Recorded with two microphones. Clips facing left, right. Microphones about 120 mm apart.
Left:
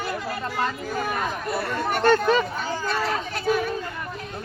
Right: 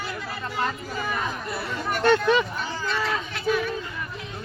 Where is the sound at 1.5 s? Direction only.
50° left (ahead or behind).